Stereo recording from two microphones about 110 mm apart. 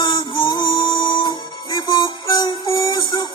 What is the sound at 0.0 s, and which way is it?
Music, 45° left (ahead or behind).